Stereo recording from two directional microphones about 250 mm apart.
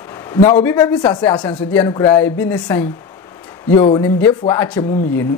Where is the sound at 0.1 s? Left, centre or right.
Centre.